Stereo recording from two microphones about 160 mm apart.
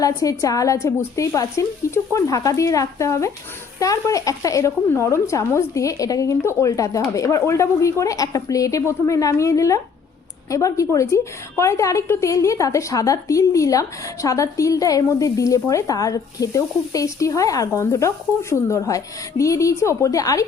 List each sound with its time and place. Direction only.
0.0 s a woman's voice: 20° left (ahead or behind)